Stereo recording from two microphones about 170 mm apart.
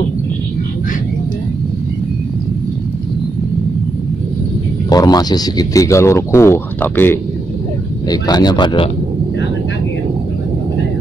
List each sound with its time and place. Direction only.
4.8 s speech: 25° left (ahead or behind)
8.1 s speech: 25° left (ahead or behind)